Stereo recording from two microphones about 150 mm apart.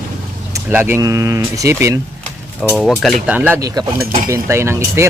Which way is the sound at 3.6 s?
25° right (ahead or behind).